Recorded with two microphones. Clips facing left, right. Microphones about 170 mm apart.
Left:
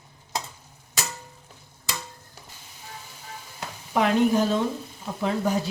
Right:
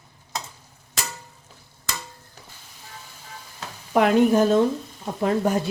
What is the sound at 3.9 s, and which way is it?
Speech, 55° right (ahead or behind).